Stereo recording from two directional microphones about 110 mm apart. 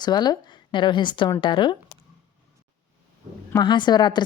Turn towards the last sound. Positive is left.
turn(degrees=40)  # may be behind; listen again after turning